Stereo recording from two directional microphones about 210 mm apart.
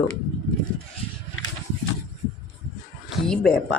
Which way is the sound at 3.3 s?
5° left (ahead or behind).